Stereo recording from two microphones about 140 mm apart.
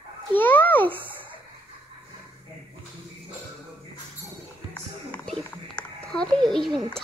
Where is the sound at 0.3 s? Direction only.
15° left (ahead or behind).